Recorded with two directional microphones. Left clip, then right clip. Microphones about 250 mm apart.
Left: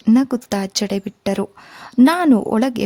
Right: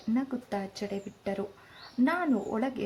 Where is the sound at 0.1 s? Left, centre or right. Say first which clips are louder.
Left 15 dB; left.